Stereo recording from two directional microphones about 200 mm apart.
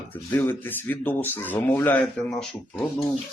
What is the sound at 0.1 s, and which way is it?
Speech, 10° left (ahead or behind).